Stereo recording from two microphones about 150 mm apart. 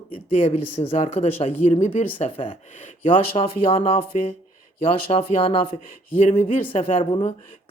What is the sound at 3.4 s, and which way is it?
Speech, 40° left (ahead or behind).